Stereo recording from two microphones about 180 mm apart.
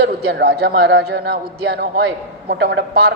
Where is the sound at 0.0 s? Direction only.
65° right (ahead or behind).